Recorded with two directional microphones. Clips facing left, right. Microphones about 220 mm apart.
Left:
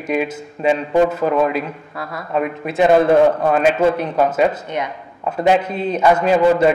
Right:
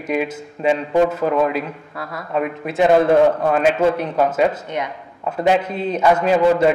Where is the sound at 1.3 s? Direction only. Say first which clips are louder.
Left 1 dB; 25° left (ahead or behind).